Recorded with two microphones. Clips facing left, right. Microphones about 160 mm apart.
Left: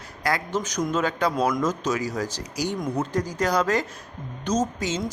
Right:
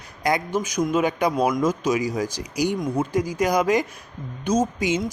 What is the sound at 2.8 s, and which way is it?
Speech, centre (ahead or behind).